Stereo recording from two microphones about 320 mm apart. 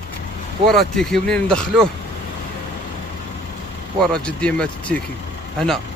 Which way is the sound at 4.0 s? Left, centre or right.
Centre.